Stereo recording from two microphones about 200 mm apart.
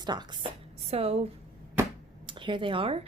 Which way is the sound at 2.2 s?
25° right (ahead or behind).